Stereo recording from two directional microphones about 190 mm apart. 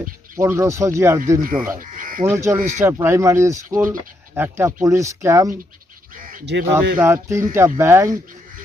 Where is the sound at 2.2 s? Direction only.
15° right (ahead or behind).